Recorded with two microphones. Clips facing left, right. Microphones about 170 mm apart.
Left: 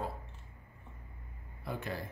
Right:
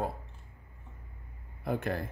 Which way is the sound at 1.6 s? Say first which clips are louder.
Right 7 dB; 50° right (ahead or behind).